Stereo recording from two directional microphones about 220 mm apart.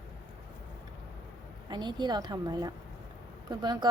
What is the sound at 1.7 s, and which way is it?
A woman's voice, 20° right (ahead or behind).